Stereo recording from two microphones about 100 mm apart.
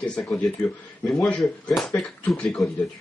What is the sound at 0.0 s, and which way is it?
Speech, 10° left (ahead or behind).